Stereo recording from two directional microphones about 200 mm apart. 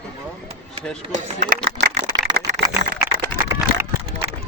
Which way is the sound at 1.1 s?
35° right (ahead or behind).